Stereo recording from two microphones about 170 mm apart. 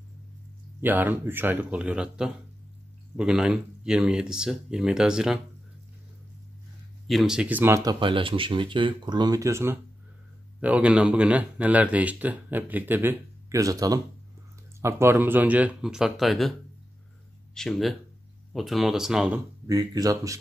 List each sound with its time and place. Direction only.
0.7 s speech: 10° right (ahead or behind)
7.1 s speech: centre (ahead or behind)
17.6 s speech: centre (ahead or behind)
19.7 s speech: 20° right (ahead or behind)